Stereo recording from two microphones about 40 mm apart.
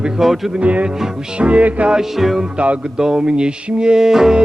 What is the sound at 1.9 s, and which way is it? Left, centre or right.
Music, centre.